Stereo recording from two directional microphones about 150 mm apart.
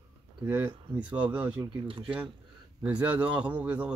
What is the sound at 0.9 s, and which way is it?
Speech, 10° right (ahead or behind).